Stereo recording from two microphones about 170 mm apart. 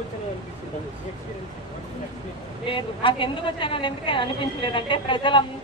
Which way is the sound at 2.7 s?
30° left (ahead or behind).